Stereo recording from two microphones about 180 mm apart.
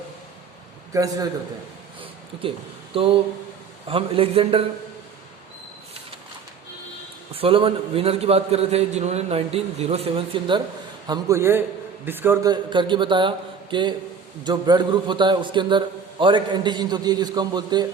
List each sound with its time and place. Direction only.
0.9 s a man's voice: 20° right (ahead or behind)
2.9 s a man's voice: 30° right (ahead or behind)
7.3 s a man's voice: 30° right (ahead or behind)